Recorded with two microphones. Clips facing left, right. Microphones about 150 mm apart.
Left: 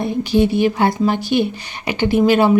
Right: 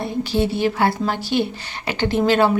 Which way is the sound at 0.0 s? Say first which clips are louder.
Left 5 dB; 15° left (ahead or behind).